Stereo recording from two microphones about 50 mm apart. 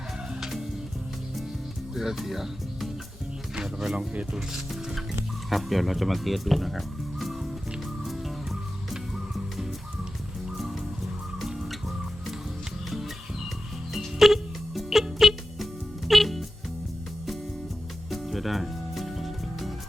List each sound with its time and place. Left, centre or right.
0.3 s music: centre
2.0 s speech: centre
3.9 s speech: right
4.4 s speech: centre
8.0 s music: centre
13.9 s music: centre
18.1 s music: centre